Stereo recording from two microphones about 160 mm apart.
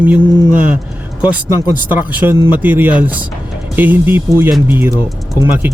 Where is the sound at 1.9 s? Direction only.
10° right (ahead or behind).